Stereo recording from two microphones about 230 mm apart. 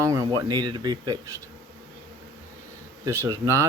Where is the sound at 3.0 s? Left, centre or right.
Centre.